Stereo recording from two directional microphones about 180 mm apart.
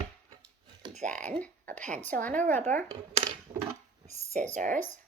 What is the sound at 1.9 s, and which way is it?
Speech, 10° left (ahead or behind).